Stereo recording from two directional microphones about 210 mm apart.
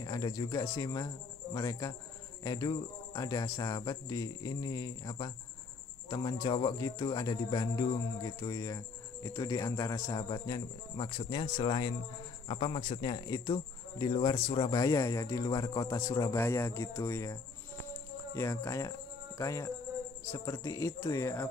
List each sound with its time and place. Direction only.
0.0 s speech: 20° left (ahead or behind)
17.9 s music: 10° left (ahead or behind)
20.3 s speech: 15° left (ahead or behind)